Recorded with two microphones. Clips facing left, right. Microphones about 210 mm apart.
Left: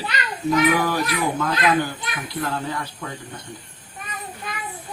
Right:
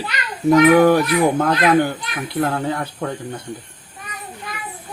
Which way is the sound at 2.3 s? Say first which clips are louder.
Right 7 dB; 60° right (ahead or behind).